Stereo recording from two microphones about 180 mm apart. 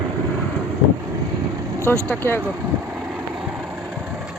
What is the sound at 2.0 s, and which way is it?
Speech, 10° left (ahead or behind).